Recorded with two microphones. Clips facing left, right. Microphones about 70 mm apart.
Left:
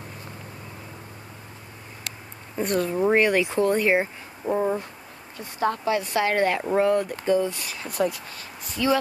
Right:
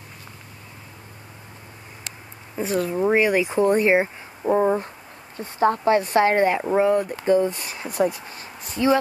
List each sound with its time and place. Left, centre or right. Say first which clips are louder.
2.5 s speech: right 1 dB; centre; by 6.6 s right
6.6 s speech: right 2 dB; centre
7.2 s speech: right 5 dB; right